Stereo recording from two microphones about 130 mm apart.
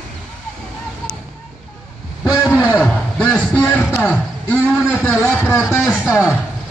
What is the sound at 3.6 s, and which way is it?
Speech, 15° left (ahead or behind).